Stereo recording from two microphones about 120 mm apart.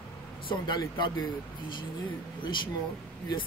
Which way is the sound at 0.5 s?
40° left (ahead or behind).